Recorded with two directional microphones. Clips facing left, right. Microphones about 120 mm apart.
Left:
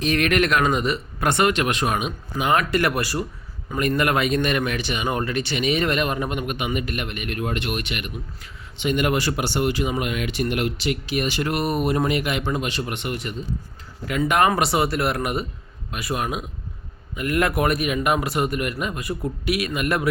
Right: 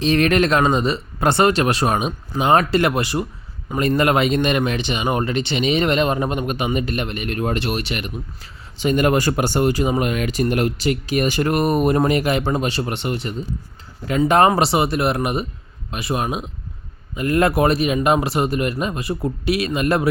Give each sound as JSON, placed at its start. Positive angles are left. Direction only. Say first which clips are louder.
{"t": 0.0, "sound": "a man's voice", "louder": "right 4 dB", "side_deg": -30}